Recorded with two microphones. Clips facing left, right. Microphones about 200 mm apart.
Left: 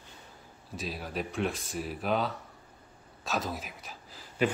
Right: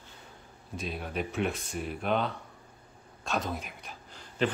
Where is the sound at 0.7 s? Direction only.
Centre (ahead or behind).